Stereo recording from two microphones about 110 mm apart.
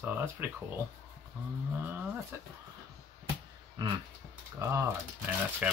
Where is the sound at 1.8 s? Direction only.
15° right (ahead or behind).